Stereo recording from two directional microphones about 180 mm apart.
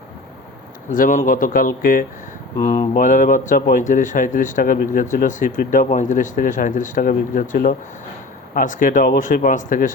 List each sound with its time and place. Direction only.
0.9 s speech: 45° left (ahead or behind)